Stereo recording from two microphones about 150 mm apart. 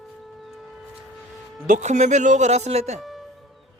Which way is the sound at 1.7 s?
50° right (ahead or behind).